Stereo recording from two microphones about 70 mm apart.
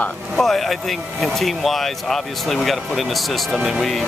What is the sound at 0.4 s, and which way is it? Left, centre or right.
Speech, centre.